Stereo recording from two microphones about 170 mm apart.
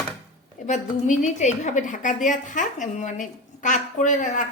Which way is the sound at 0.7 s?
45° left (ahead or behind).